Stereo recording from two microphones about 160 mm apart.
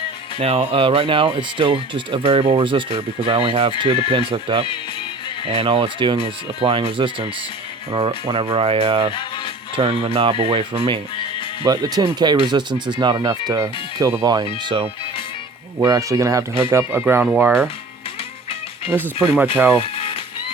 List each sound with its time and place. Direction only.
0.3 s speech: 40° right (ahead or behind); by 14.4 s 20° right (ahead or behind)
15.8 s speech: 20° right (ahead or behind)
18.9 s speech: 10° right (ahead or behind)
19.8 s cat: 35° left (ahead or behind)